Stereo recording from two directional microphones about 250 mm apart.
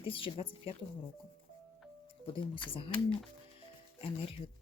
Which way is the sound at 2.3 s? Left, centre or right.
Centre.